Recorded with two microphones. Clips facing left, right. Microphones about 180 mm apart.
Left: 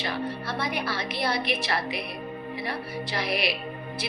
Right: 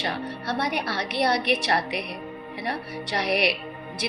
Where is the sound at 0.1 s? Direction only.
75° right (ahead or behind).